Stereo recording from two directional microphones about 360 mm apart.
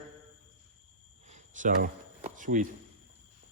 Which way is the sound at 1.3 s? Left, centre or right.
Right.